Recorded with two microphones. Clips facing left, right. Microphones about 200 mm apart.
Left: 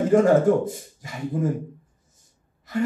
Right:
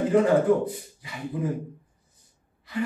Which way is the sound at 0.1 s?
45° left (ahead or behind).